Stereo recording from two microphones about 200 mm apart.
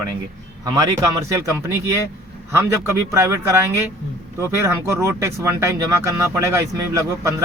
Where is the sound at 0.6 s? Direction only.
15° right (ahead or behind).